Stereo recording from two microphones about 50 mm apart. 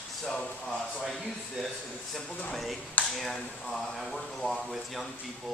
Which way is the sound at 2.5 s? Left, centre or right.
Centre.